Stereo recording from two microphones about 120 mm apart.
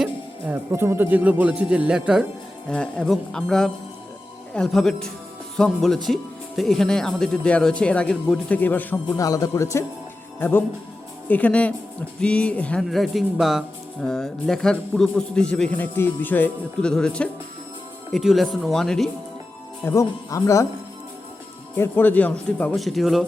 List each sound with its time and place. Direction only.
0.0 s speech: 15° right (ahead or behind)
2.6 s a man's voice: 10° left (ahead or behind)
9.0 s speech: 30° left (ahead or behind)
11.3 s a man's voice: 10° left (ahead or behind)
19.8 s speech: 25° left (ahead or behind)
21.8 s speech: 15° left (ahead or behind)
22.8 s a man's voice: centre (ahead or behind)